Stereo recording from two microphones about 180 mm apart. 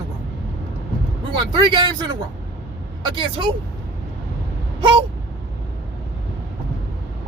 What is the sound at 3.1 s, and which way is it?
Speech, 25° right (ahead or behind).